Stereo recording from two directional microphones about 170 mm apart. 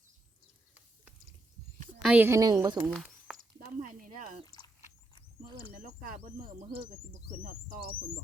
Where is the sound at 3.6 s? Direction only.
55° right (ahead or behind).